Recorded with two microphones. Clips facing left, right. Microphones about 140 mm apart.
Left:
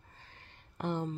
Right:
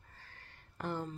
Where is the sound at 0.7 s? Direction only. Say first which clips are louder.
Left 4 dB; 20° left (ahead or behind).